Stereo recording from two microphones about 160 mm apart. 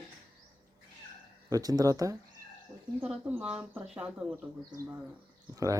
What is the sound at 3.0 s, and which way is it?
Speech, 10° right (ahead or behind).